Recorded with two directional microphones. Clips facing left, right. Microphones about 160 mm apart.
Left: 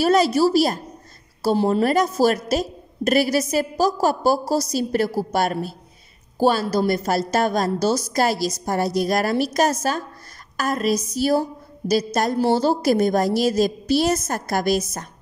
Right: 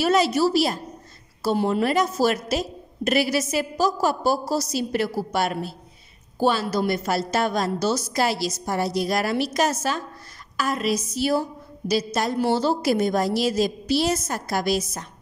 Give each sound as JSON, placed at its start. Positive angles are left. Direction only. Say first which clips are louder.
{"t": 0.0, "sound": "a woman's voice", "louder": "left 3 dB", "side_deg": 40}